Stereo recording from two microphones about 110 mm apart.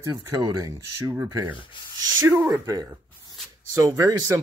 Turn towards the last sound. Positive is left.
turn(degrees=-30)  # may be behind; listen again after turning